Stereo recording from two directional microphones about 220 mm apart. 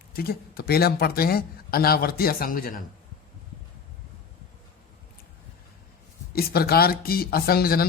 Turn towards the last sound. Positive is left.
turn(degrees=45)  # may be behind; listen again after turning